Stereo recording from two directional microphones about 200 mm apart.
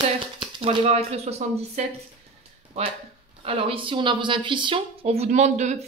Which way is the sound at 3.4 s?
30° right (ahead or behind).